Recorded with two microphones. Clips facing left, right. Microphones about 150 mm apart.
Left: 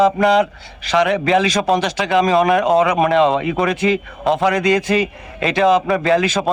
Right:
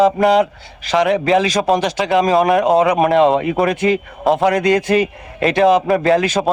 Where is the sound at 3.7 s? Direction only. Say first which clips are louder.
Right 1 dB; 50° right (ahead or behind).